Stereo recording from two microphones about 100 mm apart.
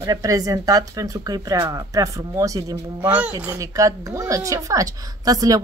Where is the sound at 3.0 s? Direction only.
15° right (ahead or behind).